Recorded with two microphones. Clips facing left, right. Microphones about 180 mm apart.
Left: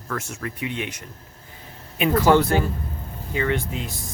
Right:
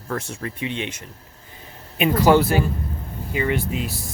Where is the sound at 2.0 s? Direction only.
15° right (ahead or behind).